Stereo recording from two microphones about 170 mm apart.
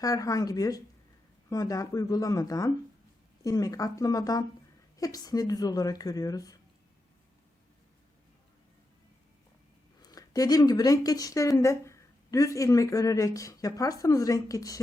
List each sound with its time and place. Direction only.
0.0 s speech: 20° left (ahead or behind)
10.0 s speech: 20° left (ahead or behind)